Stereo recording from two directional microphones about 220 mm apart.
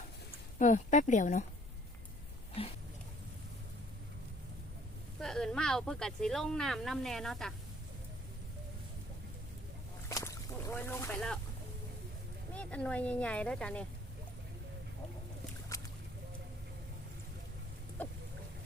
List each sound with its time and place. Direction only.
0.6 s speech: 35° left (ahead or behind)
2.6 s a sound: 25° left (ahead or behind)
5.2 s speech: 5° left (ahead or behind)
10.1 s boat: 15° left (ahead or behind)
12.5 s speech: 5° left (ahead or behind)
18.0 s boat: 5° left (ahead or behind)